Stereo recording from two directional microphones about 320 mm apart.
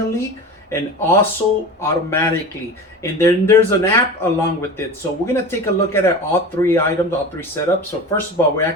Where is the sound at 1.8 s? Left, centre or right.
Centre.